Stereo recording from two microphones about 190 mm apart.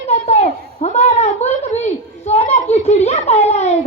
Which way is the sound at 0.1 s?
35° left (ahead or behind).